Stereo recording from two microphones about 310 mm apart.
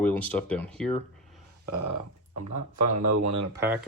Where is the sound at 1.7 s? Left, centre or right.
Right.